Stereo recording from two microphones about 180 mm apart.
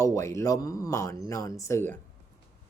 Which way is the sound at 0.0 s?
15° left (ahead or behind).